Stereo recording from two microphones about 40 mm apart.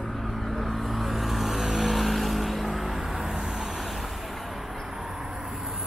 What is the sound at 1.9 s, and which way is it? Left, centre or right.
Vehicle, centre.